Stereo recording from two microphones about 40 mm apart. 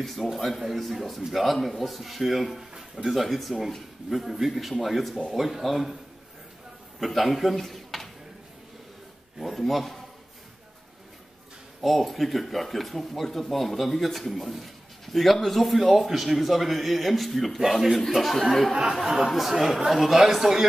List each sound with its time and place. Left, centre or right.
0.0 s speech: centre
7.0 s a man's voice: centre
9.4 s speech: centre
11.8 s speech: centre
18.0 s speech: centre
18.7 s speech: centre